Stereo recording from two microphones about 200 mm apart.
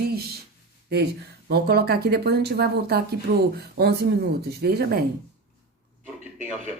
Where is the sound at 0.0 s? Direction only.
50° right (ahead or behind).